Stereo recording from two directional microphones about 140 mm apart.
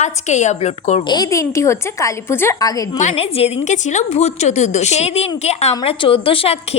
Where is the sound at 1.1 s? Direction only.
25° left (ahead or behind).